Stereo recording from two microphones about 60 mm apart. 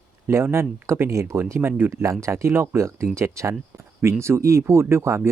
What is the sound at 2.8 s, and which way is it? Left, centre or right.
Speech, right.